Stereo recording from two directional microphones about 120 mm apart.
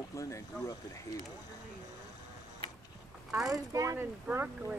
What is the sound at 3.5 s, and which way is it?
Speech, 30° right (ahead or behind).